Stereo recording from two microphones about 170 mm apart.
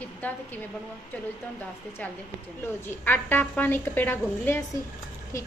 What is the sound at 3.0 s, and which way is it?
A woman's voice, 10° left (ahead or behind).